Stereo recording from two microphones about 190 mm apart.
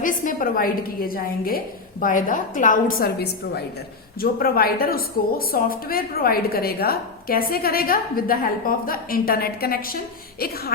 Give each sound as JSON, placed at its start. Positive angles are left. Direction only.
{"t": 0.0, "sound": "a woman's voice", "side_deg": 45}